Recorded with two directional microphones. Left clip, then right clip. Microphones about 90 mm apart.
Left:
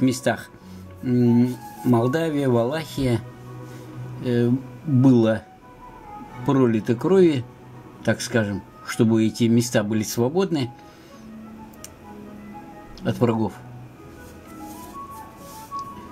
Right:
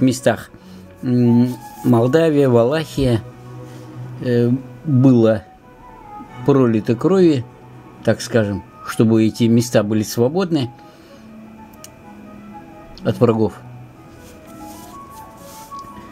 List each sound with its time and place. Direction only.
0.0 s speech: 45° right (ahead or behind)
6.4 s speech: 45° right (ahead or behind)
13.0 s speech: 45° right (ahead or behind)